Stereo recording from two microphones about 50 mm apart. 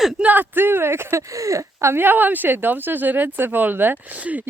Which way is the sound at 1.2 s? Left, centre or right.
Right.